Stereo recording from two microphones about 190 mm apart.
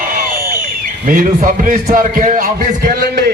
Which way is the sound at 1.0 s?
45° right (ahead or behind).